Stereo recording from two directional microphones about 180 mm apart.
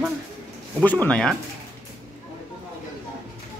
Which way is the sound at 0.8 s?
10° left (ahead or behind).